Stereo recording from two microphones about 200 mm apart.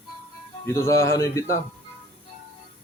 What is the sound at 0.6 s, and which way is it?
Speech, 15° left (ahead or behind).